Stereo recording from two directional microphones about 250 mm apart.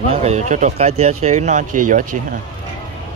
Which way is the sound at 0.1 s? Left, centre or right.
Right.